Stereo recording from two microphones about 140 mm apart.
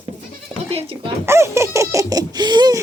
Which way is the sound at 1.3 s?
20° right (ahead or behind).